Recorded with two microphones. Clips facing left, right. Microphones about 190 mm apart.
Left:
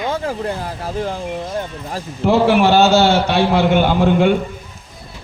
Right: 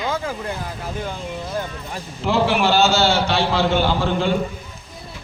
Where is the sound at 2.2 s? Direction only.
55° left (ahead or behind).